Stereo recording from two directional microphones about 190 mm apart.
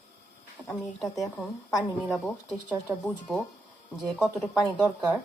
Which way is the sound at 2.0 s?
Centre (ahead or behind).